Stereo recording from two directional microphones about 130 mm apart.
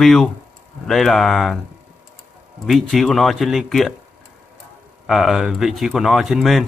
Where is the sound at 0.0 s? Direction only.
Centre (ahead or behind).